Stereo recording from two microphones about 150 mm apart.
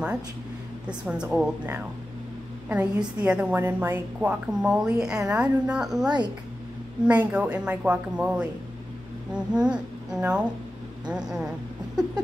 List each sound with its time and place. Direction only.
0.8 s a woman's voice: 5° right (ahead or behind)
6.0 s speech: 30° right (ahead or behind)
7.1 s a woman's voice: 10° right (ahead or behind)